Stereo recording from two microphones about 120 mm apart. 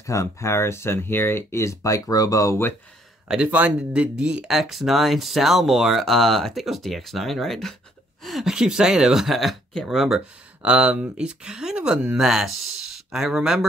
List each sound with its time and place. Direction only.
0.0 s speech: 25° left (ahead or behind)
3.3 s speech: 10° right (ahead or behind)